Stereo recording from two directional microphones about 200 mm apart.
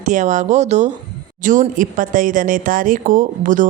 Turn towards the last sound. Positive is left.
turn(degrees=-40)  # may be behind; listen again after turning